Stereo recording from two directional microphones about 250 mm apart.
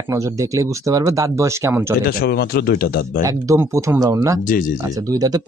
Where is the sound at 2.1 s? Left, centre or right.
Left.